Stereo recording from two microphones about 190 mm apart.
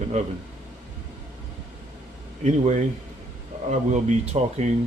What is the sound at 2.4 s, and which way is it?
Speech, 40° right (ahead or behind).